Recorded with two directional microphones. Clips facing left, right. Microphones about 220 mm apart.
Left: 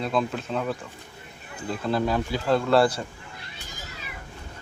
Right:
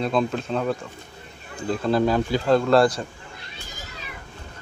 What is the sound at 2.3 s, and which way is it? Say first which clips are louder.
Speech: right 2 dB; 5° left (ahead or behind).